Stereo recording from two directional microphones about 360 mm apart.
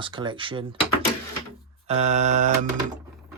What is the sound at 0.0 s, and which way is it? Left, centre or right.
Speech, centre.